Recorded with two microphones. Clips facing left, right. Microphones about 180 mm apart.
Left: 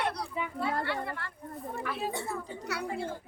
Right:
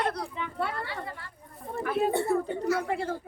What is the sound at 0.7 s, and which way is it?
Speech, 60° left (ahead or behind).